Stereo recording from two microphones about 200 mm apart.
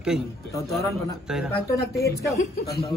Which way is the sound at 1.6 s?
50° left (ahead or behind).